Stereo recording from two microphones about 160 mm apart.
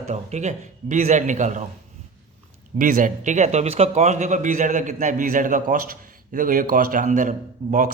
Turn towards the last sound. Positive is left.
turn(degrees=-55)  # may be behind; listen again after turning